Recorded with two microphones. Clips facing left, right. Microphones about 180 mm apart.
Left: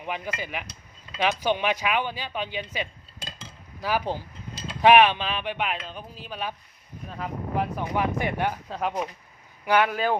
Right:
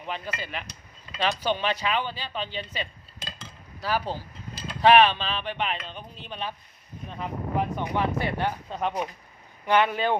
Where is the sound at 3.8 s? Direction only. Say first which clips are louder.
Left 1 dB; 15° left (ahead or behind).